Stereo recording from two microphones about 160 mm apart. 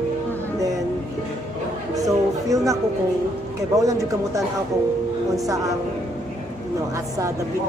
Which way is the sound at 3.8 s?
20° right (ahead or behind).